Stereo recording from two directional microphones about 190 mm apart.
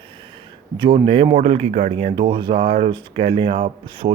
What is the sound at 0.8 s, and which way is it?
Speech, 30° right (ahead or behind).